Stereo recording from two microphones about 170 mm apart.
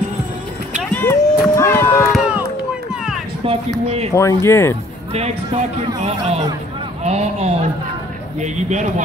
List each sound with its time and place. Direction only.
0.9 s run: 10° left (ahead or behind)
2.1 s a sound: 5° right (ahead or behind)
3.4 s a man's voice: 35° right (ahead or behind)
4.1 s speech: 20° left (ahead or behind)
5.9 s a man's voice: 40° right (ahead or behind)